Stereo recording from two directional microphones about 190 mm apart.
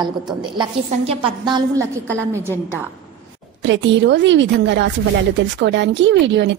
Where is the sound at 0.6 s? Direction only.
25° right (ahead or behind).